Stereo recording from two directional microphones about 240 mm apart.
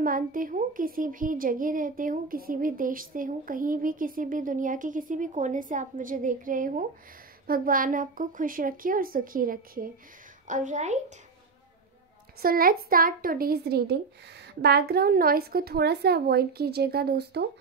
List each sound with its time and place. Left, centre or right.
0.0 s speech: right
12.4 s speech: right